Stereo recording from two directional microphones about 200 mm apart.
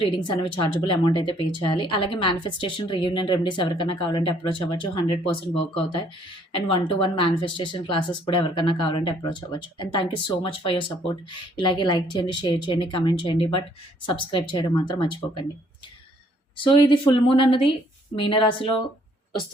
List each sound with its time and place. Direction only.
0.0 s a woman's voice: 25° left (ahead or behind)
16.6 s a woman's voice: 25° left (ahead or behind)